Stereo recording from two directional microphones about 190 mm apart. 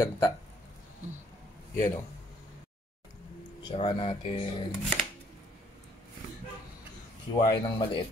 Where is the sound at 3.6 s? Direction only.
25° left (ahead or behind).